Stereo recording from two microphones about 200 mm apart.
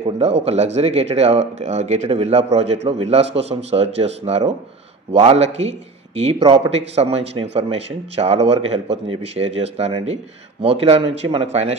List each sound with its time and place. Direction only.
0.0 s a man's voice: 30° right (ahead or behind)